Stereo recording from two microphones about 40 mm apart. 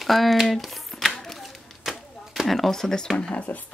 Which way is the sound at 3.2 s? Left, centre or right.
Left.